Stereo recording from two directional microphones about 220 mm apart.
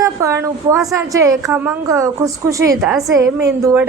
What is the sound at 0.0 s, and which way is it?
A woman's voice, 15° right (ahead or behind).